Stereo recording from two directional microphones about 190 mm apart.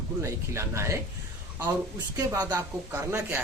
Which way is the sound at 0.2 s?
15° right (ahead or behind).